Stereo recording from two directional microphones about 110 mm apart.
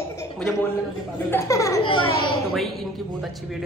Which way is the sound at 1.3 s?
30° left (ahead or behind).